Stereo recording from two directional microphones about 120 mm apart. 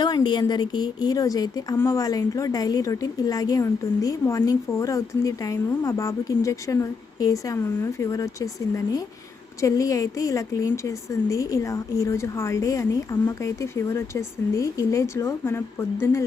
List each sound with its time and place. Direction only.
0.0 s a woman's voice: 35° left (ahead or behind); by 16.2 s 20° left (ahead or behind)